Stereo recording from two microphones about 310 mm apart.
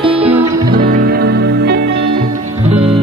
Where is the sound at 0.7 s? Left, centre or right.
Right.